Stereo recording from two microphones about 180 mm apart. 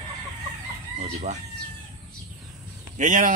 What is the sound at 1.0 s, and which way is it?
Speech, 40° right (ahead or behind).